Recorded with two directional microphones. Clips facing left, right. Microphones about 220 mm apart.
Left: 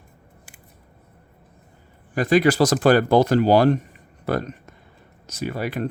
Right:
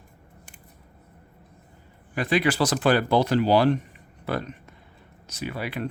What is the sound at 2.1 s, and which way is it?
Speech, 45° left (ahead or behind).